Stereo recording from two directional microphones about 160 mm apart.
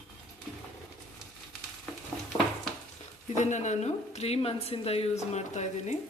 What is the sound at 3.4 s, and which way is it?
A woman's voice, 50° left (ahead or behind).